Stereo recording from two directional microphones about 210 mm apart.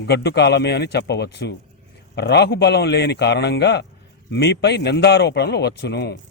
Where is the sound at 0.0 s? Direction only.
50° left (ahead or behind).